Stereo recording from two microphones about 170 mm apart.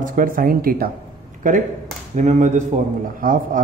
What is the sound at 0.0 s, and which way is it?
Speech, 55° right (ahead or behind).